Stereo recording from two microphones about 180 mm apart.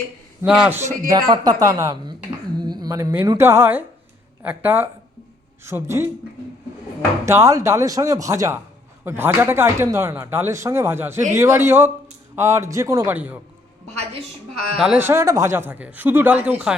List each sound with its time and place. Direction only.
0.4 s speech: 10° right (ahead or behind)
7.3 s speech: 15° right (ahead or behind)
14.8 s speech: 10° right (ahead or behind)